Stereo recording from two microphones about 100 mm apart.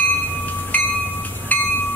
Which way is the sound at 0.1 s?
15° left (ahead or behind).